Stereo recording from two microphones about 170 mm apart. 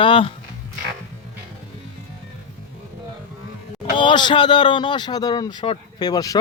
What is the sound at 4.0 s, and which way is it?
Speech, 30° left (ahead or behind).